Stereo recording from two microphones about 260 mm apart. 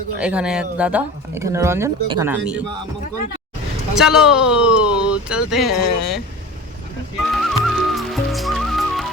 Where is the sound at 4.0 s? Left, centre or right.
Centre.